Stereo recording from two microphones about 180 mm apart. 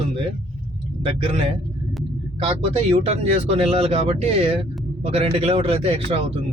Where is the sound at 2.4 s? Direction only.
35° right (ahead or behind).